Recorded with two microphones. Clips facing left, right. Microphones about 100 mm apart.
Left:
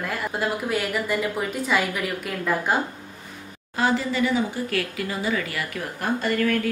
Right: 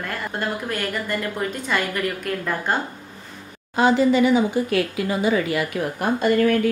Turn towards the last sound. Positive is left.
turn(degrees=-20)  # may be behind; listen again after turning